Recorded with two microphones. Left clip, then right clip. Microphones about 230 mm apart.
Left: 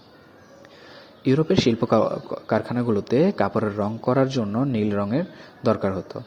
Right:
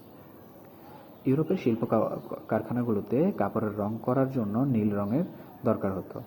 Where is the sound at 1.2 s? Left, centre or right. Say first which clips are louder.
Left 7 dB; left.